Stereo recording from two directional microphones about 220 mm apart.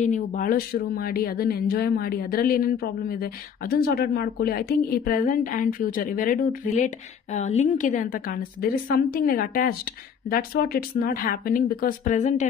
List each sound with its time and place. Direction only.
0.0 s speech: 35° left (ahead or behind)